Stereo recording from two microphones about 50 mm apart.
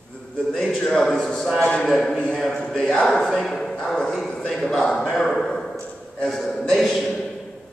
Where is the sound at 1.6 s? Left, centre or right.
Centre.